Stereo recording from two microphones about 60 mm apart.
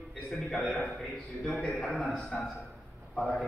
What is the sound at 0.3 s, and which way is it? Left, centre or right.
Speech, centre.